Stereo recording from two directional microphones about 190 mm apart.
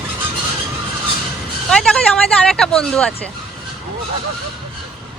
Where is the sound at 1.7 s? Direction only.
5° left (ahead or behind).